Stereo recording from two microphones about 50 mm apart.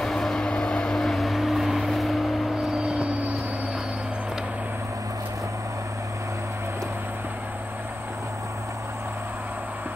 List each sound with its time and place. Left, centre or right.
0.0 s vehicle: centre
0.9 s vehicle: centre
2.5 s vehicle: right